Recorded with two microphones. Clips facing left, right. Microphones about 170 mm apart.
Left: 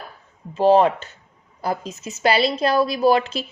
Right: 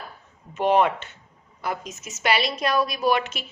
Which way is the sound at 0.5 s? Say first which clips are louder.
Left 5 dB; 30° left (ahead or behind).